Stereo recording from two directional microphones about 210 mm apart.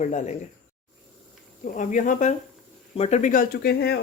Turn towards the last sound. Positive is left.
turn(degrees=50)  # may be behind; listen again after turning